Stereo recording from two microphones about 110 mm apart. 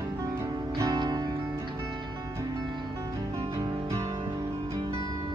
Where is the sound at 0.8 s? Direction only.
35° right (ahead or behind).